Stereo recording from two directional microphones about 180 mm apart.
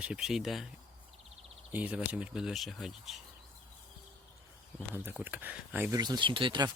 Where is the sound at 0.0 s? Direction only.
5° right (ahead or behind).